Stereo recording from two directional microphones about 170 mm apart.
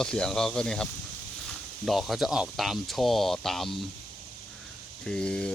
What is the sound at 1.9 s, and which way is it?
Speech, centre (ahead or behind).